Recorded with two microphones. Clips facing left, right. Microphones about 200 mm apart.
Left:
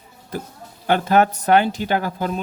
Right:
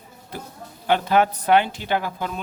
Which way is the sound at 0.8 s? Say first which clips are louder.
Left 2 dB; 45° left (ahead or behind).